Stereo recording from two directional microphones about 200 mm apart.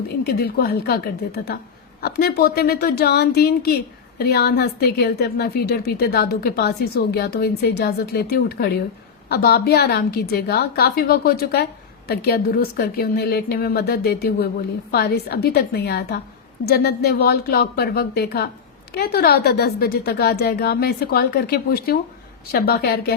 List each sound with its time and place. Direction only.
0.3 s speech: 50° left (ahead or behind)